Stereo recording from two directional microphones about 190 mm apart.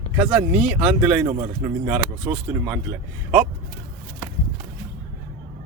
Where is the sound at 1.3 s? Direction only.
25° right (ahead or behind).